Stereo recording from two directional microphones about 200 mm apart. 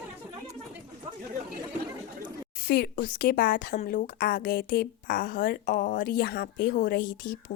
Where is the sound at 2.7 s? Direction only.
45° left (ahead or behind).